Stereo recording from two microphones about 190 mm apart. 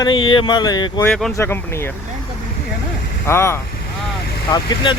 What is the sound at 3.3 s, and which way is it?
Speech, 15° left (ahead or behind).